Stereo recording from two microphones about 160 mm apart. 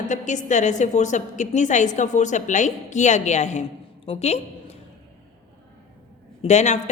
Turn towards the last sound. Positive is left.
turn(degrees=45)  # may be behind; listen again after turning